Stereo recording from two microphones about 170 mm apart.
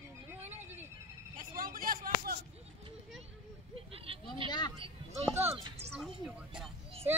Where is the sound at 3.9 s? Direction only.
35° right (ahead or behind).